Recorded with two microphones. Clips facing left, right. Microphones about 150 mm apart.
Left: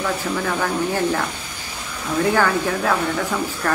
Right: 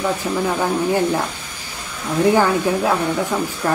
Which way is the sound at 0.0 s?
15° right (ahead or behind).